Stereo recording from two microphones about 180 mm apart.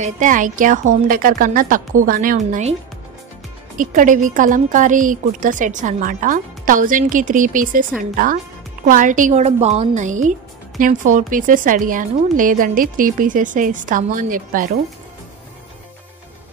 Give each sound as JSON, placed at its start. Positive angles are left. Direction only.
{"t": 0.0, "sound": "a woman's voice", "side_deg": -45}
{"t": 3.7, "sound": "a woman's voice", "side_deg": -45}